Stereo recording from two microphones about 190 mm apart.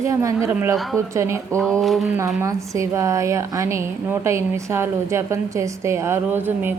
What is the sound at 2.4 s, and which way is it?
Speech, 15° right (ahead or behind).